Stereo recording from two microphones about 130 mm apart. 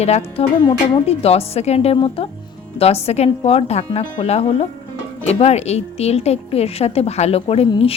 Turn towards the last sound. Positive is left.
turn(degrees=50)  # may be behind; listen again after turning